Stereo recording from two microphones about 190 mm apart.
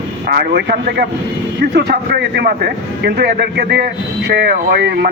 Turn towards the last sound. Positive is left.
turn(degrees=-60)  # may be behind; listen again after turning